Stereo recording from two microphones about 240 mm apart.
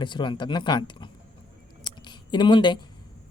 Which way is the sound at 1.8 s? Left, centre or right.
Centre.